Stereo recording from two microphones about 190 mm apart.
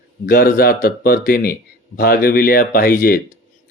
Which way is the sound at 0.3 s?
50° left (ahead or behind).